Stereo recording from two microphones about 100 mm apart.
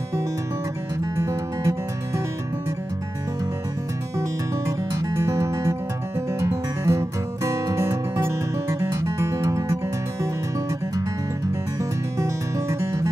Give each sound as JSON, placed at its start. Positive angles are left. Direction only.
{"t": 1.1, "sound": "music", "side_deg": -30}
{"t": 4.2, "sound": "music", "side_deg": -30}
{"t": 12.2, "sound": "music", "side_deg": -30}